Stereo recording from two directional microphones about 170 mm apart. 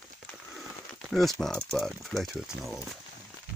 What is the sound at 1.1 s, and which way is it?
Speech, centre (ahead or behind).